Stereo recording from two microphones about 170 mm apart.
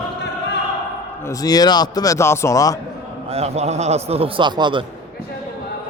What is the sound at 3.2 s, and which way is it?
A man's voice, 35° right (ahead or behind).